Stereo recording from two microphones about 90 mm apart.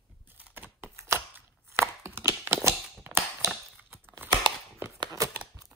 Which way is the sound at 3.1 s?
30° right (ahead or behind).